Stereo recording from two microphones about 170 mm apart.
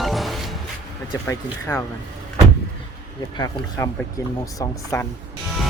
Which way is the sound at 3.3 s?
20° left (ahead or behind).